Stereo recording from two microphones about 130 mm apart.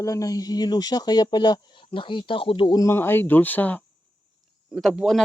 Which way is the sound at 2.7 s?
20° left (ahead or behind).